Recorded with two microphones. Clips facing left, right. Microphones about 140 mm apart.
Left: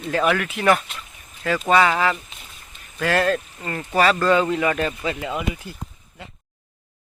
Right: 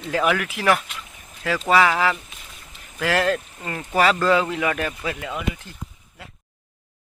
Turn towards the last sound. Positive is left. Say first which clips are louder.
# left 3 dB
turn(degrees=5)  # may be behind; listen again after turning